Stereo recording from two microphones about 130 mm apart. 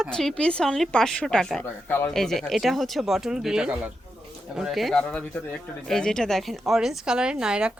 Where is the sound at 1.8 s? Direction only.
15° left (ahead or behind).